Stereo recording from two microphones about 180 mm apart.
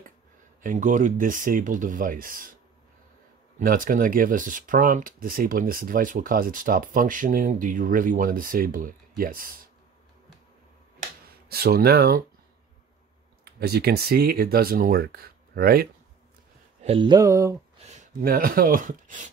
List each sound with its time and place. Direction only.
0.7 s speech: 45° right (ahead or behind)
3.5 s speech: 50° right (ahead or behind)
11.0 s finger snapping: 60° right (ahead or behind)
13.4 s speech: 60° right (ahead or behind)
16.8 s mantra: 30° right (ahead or behind)
17.8 s a sound: 40° right (ahead or behind)
18.3 s speech: 55° right (ahead or behind)